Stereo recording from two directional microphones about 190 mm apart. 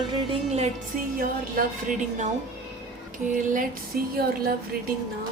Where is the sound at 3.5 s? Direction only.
50° right (ahead or behind).